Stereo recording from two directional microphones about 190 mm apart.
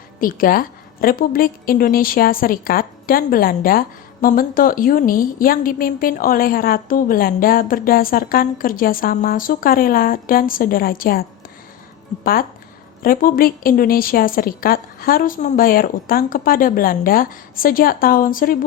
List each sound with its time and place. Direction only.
0.2 s a woman's voice: 50° left (ahead or behind)